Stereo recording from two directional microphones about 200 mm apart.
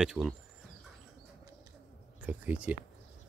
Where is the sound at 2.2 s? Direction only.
5° right (ahead or behind).